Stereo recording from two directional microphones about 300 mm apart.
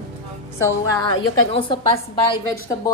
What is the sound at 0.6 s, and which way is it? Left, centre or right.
A woman's voice, centre.